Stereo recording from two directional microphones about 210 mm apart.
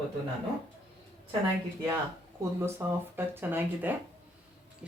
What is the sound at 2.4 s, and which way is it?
Speech, 10° right (ahead or behind).